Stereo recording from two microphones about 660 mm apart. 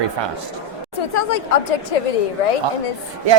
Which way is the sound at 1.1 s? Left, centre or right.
Left.